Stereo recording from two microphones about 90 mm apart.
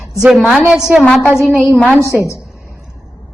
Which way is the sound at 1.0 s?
20° left (ahead or behind).